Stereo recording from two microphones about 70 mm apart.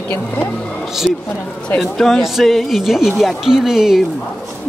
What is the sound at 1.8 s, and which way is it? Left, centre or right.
Speech, centre.